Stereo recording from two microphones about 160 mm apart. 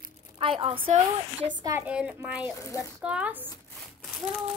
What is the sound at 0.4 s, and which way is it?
A woman's voice, 35° right (ahead or behind).